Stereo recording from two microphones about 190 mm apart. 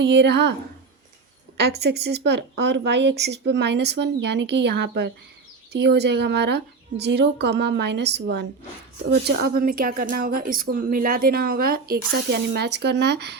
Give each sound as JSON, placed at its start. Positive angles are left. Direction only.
{"t": 0.0, "sound": "speech", "side_deg": -65}
{"t": 1.5, "sound": "speech", "side_deg": -60}